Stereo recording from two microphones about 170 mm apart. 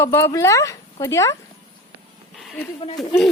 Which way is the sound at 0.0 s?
15° left (ahead or behind).